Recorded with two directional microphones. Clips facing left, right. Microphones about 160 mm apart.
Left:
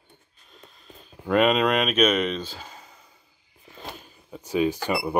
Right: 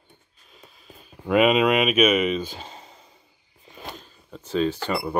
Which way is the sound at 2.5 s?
25° right (ahead or behind).